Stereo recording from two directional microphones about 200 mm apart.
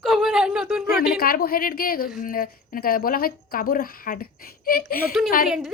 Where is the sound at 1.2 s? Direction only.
50° left (ahead or behind).